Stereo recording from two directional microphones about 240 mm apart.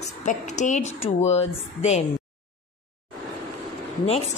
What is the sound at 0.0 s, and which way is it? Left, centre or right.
A woman's voice, left.